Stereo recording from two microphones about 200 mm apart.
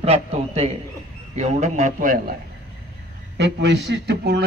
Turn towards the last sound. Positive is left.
turn(degrees=-60)  # may be behind; listen again after turning